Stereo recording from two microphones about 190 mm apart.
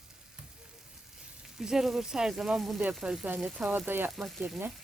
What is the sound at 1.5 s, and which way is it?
Stir, centre (ahead or behind).